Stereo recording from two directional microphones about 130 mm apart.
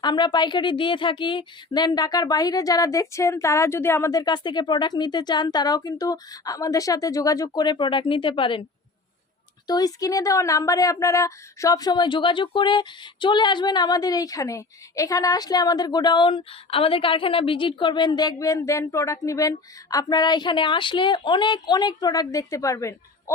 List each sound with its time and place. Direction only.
0.0 s a woman's voice: 35° left (ahead or behind)
9.6 s a woman's voice: 30° left (ahead or behind)